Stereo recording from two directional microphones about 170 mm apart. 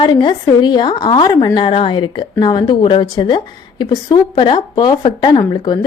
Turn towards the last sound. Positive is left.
turn(degrees=25)  # may be behind; listen again after turning